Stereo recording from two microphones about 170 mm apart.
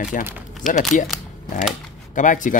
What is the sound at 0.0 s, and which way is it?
Speech, 50° left (ahead or behind).